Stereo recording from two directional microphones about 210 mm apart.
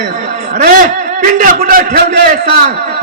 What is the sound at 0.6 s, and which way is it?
A man's voice, 40° right (ahead or behind).